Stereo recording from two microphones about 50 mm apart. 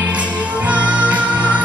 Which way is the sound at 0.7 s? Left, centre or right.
Right.